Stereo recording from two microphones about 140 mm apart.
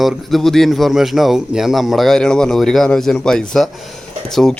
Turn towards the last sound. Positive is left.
turn(degrees=0)  # may be behind; listen again after turning